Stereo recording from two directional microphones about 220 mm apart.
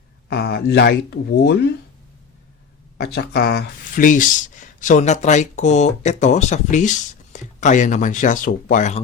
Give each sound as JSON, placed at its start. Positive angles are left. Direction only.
{"t": 0.3, "sound": "speech", "side_deg": 45}
{"t": 3.0, "sound": "speech", "side_deg": 45}